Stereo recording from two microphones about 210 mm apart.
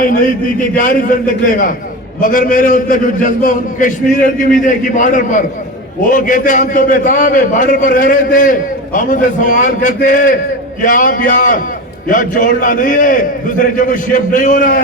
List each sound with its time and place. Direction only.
0.0 s a man's voice: 40° left (ahead or behind)